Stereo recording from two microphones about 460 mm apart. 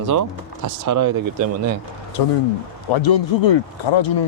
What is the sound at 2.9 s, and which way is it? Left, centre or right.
Speech, left.